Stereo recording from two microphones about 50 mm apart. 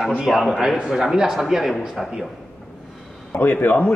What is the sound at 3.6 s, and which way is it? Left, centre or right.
Speech, left.